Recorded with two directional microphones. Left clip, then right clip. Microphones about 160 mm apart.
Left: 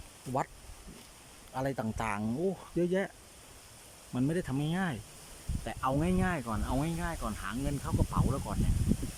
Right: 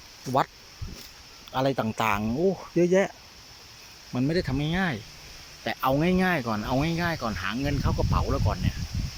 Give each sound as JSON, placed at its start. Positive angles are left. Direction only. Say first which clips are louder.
{"t": 1.5, "sound": "speech", "louder": "right 9 dB", "side_deg": -5}
{"t": 4.1, "sound": "speech", "louder": "right 6 dB", "side_deg": 0}